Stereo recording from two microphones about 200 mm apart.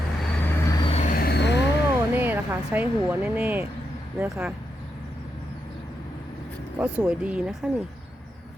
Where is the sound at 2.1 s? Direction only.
10° right (ahead or behind).